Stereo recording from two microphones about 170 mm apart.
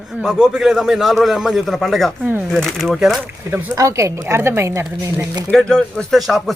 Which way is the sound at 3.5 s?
20° right (ahead or behind).